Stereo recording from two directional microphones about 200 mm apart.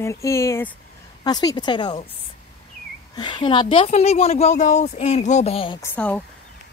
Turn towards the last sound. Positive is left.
turn(degrees=5)  # may be behind; listen again after turning